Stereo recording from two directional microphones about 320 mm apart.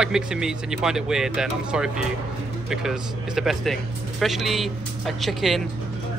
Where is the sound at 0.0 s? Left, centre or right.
Centre.